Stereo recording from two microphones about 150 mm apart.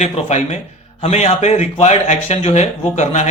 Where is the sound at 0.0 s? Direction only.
50° left (ahead or behind).